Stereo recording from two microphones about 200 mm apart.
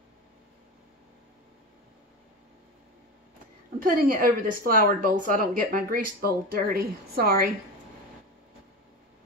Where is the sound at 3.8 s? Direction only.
45° right (ahead or behind).